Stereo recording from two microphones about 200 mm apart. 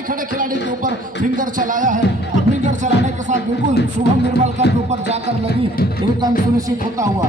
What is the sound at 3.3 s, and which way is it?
Speech, 60° left (ahead or behind).